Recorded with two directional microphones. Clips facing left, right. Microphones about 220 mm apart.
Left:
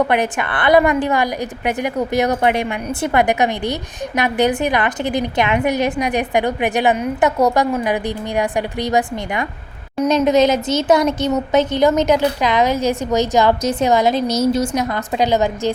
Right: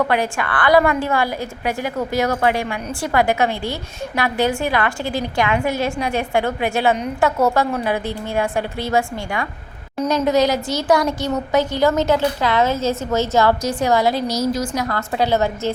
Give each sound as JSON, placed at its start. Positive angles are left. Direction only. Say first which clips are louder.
{"t": 0.0, "sound": "a woman's voice", "louder": "left 2 dB", "side_deg": 20}